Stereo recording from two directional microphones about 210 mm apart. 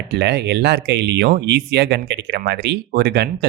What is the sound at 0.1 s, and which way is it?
Speech, 55° right (ahead or behind).